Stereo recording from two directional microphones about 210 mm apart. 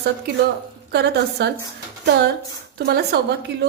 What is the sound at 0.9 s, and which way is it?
Speech, 50° right (ahead or behind).